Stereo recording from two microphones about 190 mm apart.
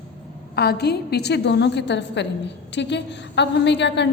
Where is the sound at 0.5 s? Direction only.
60° left (ahead or behind).